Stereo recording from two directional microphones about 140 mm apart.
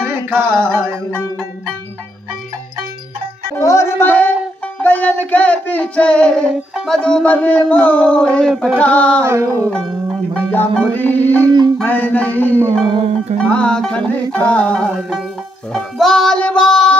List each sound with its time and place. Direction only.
0.0 s music: 15° right (ahead or behind)
3.5 s speech: 20° left (ahead or behind)
4.0 s music: 15° left (ahead or behind)
4.8 s a sound: 10° left (ahead or behind)
9.2 s music: 20° right (ahead or behind)
10.5 s a sound: 10° left (ahead or behind)
12.8 s music: 45° right (ahead or behind)
13.4 s a sound: 10° left (ahead or behind)
15.0 s music: 5° right (ahead or behind)